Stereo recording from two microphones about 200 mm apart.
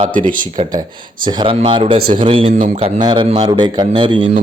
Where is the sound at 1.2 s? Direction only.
20° right (ahead or behind).